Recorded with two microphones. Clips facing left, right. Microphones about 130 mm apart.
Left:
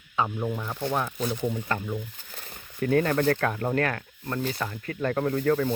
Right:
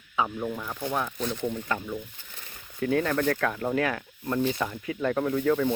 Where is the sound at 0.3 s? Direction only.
10° left (ahead or behind).